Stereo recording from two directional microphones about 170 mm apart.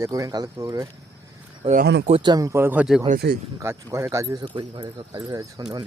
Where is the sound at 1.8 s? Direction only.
90° right.